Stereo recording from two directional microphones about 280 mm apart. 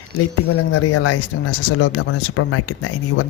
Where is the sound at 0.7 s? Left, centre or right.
Left.